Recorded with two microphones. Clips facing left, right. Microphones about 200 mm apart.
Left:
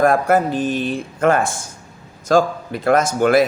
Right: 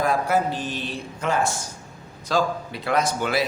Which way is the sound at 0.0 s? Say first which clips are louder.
Left 7 dB; 50° left (ahead or behind).